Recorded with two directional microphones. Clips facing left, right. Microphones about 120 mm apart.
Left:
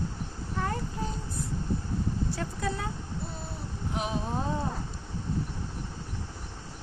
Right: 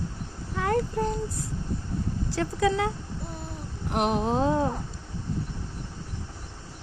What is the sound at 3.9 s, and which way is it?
Speech, 70° right (ahead or behind).